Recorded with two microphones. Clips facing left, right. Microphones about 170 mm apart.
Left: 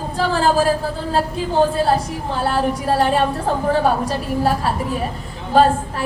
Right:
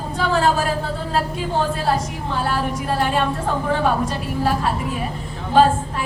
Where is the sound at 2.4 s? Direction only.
35° left (ahead or behind).